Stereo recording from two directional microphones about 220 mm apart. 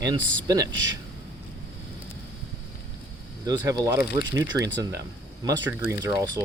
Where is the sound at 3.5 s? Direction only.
20° right (ahead or behind).